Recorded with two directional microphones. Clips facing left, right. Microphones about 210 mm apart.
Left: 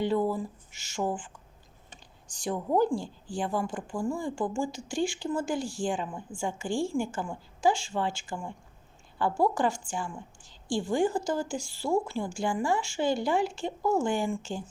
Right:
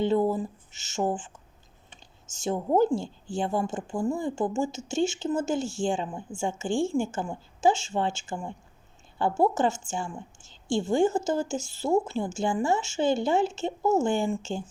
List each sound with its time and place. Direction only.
0.0 s a woman's voice: 25° right (ahead or behind)